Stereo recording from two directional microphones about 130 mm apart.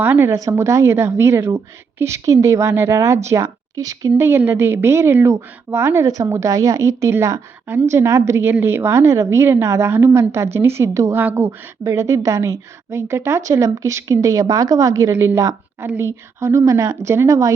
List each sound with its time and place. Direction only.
0.0 s a woman's voice: 15° right (ahead or behind)